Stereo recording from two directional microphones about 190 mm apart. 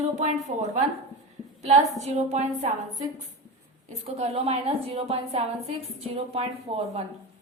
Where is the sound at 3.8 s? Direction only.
35° right (ahead or behind).